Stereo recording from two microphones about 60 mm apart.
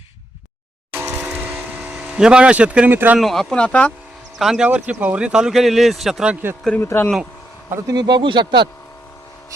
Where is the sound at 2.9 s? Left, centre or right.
Right.